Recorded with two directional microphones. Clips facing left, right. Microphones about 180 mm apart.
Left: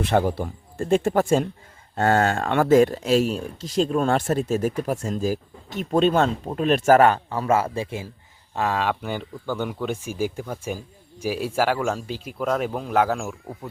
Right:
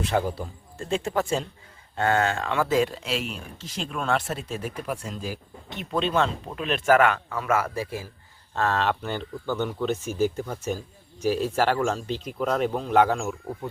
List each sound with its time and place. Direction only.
0.1 s a man's voice: 65° left (ahead or behind); by 8.0 s 25° left (ahead or behind)
8.5 s speech: 10° left (ahead or behind)